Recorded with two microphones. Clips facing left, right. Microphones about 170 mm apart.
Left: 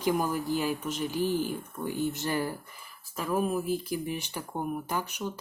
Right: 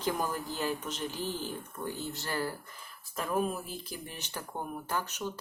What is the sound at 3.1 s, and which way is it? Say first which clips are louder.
Speech: left 3 dB; 5° left (ahead or behind).